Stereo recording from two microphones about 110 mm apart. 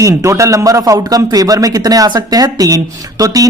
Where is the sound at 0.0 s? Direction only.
30° right (ahead or behind).